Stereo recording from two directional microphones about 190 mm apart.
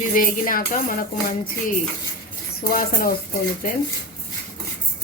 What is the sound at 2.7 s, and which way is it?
Speech, 50° left (ahead or behind).